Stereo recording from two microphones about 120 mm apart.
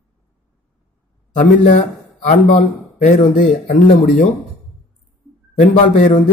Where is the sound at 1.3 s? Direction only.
85° left.